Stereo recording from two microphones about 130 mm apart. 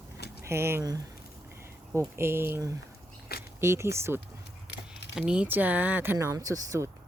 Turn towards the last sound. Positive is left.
turn(degrees=-25)  # may be behind; listen again after turning